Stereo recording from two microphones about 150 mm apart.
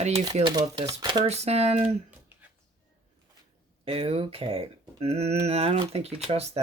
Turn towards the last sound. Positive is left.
turn(degrees=-45)  # may be behind; listen again after turning